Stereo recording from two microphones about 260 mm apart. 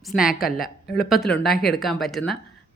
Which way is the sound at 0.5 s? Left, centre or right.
Centre.